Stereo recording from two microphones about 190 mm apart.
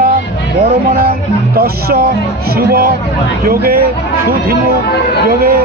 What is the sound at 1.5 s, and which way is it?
Speech, 55° right (ahead or behind).